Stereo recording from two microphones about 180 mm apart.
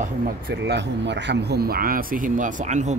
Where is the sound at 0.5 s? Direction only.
75° right (ahead or behind).